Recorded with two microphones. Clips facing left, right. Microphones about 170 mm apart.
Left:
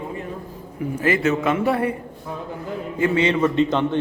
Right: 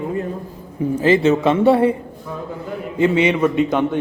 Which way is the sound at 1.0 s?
30° right (ahead or behind).